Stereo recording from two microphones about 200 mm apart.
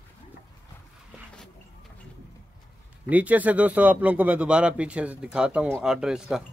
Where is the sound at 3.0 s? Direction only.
5° right (ahead or behind).